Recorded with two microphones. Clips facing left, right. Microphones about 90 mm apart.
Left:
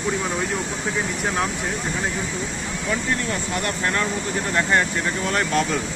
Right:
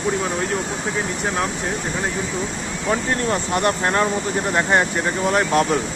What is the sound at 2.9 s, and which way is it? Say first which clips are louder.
Speech: right 4 dB; 35° right (ahead or behind).